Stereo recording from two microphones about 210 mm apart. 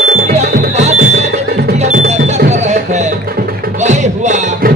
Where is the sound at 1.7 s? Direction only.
35° right (ahead or behind).